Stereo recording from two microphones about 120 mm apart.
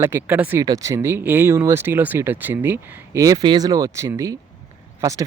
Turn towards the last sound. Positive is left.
turn(degrees=-30)  # may be behind; listen again after turning